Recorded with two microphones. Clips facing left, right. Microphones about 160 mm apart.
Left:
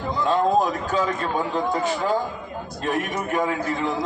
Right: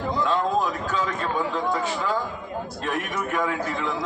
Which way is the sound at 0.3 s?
40° left (ahead or behind).